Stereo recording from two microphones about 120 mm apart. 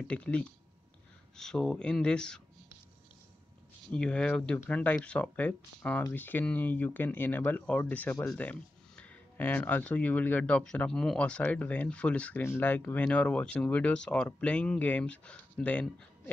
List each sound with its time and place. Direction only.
0.0 s speech: 10° left (ahead or behind)
3.9 s speech: 10° left (ahead or behind)